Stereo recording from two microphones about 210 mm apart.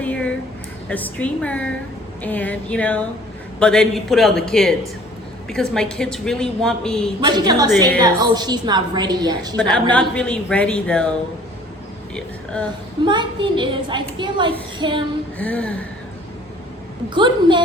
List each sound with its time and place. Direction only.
0.0 s a sound: 5° left (ahead or behind)
0.9 s a woman's voice: 5° left (ahead or behind)
7.3 s a woman's voice: 20° right (ahead or behind)
9.6 s a woman's voice: 5° left (ahead or behind)
13.1 s a woman's voice: 20° right (ahead or behind)
15.4 s speech: 5° left (ahead or behind)
17.2 s a woman's voice: 20° right (ahead or behind)